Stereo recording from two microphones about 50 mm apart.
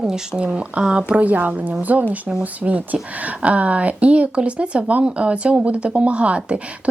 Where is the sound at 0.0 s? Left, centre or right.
Centre.